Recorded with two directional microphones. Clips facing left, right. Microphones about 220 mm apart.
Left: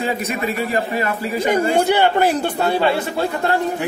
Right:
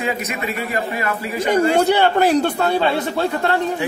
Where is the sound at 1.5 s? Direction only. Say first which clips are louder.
Right 2 dB; 10° left (ahead or behind).